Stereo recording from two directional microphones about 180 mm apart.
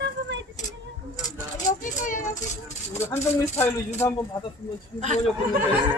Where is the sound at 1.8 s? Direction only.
45° left (ahead or behind).